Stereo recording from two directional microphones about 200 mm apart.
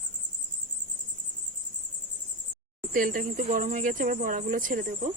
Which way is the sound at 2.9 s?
45° right (ahead or behind).